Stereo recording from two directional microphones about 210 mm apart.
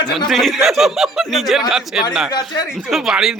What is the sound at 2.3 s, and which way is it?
Speech, 20° left (ahead or behind).